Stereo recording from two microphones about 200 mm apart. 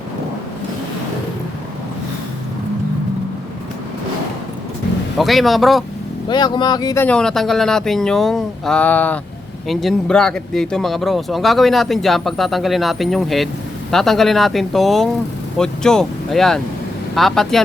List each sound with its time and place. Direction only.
5.1 s speech: centre (ahead or behind)
6.2 s speech: 20° left (ahead or behind); by 17.6 s centre (ahead or behind)